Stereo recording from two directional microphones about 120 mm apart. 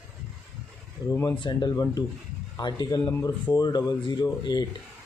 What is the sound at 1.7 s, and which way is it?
Speech, 25° left (ahead or behind).